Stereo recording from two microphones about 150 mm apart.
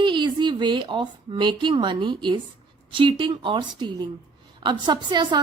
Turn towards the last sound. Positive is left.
turn(degrees=-30)  # may be behind; listen again after turning